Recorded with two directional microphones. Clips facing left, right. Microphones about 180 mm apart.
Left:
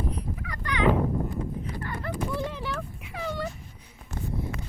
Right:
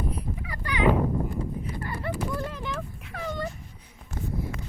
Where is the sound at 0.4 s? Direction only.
10° right (ahead or behind).